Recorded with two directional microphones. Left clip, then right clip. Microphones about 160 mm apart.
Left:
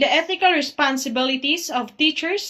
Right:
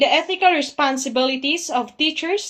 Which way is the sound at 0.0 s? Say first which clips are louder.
Right 2 dB; 45° right (ahead or behind).